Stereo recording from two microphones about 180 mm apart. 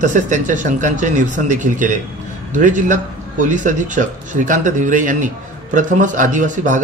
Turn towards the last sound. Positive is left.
turn(degrees=-45)  # may be behind; listen again after turning